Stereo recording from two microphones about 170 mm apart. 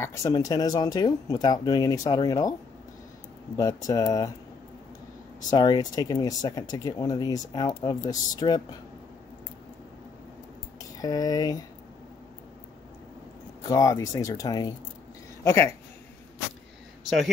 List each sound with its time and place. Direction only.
0.0 s speech: 20° left (ahead or behind)
3.5 s speech: 20° left (ahead or behind)
5.5 s speech: 25° left (ahead or behind)
11.0 s speech: 20° left (ahead or behind)
13.7 s speech: 20° left (ahead or behind)